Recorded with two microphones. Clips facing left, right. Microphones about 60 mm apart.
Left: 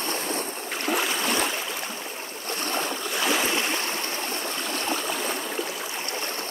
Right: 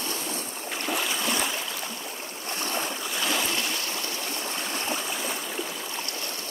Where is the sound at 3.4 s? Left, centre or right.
Left.